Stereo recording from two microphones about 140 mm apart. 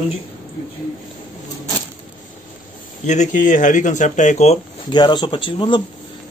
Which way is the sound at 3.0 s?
60° left (ahead or behind).